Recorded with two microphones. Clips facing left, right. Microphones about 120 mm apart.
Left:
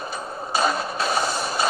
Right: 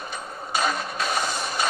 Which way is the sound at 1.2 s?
Centre (ahead or behind).